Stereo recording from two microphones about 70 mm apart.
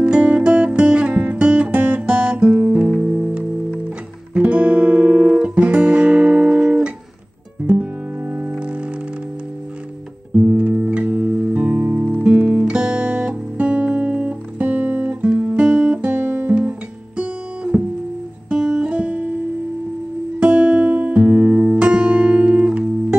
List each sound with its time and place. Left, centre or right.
0.0 s music: centre
4.3 s guitar: right
7.7 s music: right
10.3 s music: centre
15.2 s guitar: centre
18.5 s music: centre
20.3 s music: centre